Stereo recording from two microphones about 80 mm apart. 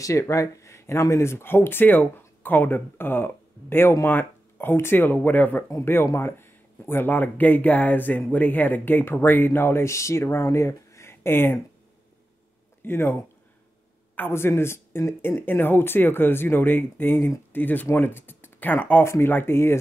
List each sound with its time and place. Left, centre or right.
0.0 s speech: left
12.8 s speech: left